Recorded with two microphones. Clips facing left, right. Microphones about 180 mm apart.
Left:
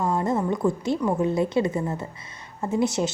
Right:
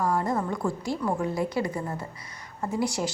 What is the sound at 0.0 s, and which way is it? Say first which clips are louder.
A woman's voice: left 2 dB; 20° left (ahead or behind).